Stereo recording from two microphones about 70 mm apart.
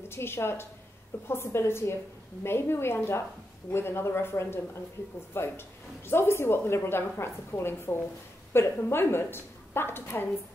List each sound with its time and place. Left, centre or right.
0.1 s speech: left